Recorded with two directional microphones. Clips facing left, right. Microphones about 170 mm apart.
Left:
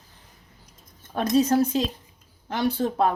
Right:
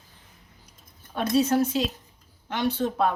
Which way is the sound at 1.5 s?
40° left (ahead or behind).